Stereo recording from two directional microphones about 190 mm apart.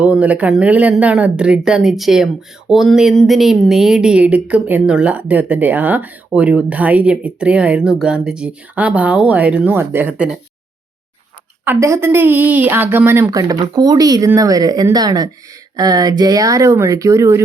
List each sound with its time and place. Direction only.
0.0 s speech: 5° right (ahead or behind)
11.6 s speech: 10° right (ahead or behind)